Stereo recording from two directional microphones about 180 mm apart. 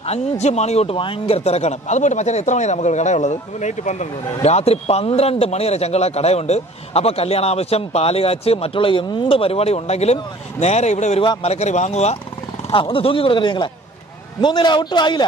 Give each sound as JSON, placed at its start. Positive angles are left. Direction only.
{"t": 0.0, "sound": "speech", "side_deg": 35}